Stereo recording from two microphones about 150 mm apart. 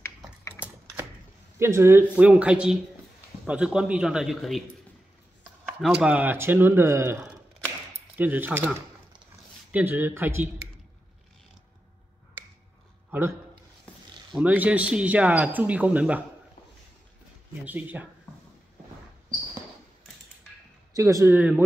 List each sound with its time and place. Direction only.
1.6 s a man's voice: 15° right (ahead or behind); by 4.6 s centre (ahead or behind)
5.7 s speech: 5° right (ahead or behind)
14.3 s speech: 10° right (ahead or behind)
17.6 s speech: 10° right (ahead or behind)
20.9 s speech: 20° right (ahead or behind)